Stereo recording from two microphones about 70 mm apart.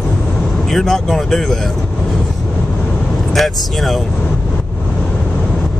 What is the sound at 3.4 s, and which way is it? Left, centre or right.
Speech, centre.